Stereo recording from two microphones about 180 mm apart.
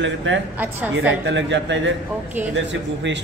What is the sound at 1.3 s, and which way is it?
Speech, 80° right.